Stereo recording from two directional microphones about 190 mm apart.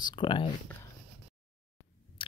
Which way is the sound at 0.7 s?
10° left (ahead or behind).